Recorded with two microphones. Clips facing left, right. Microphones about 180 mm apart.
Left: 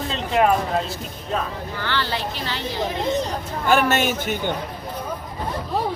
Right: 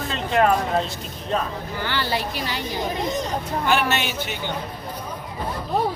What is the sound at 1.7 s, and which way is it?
Speech, 15° right (ahead or behind).